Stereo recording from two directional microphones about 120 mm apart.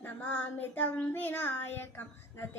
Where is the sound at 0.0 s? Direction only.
15° left (ahead or behind).